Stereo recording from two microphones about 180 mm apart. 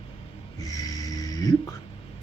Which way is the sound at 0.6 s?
20° left (ahead or behind).